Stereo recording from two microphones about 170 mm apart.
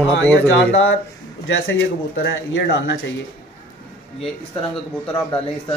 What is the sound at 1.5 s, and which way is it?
Speech, 90° left.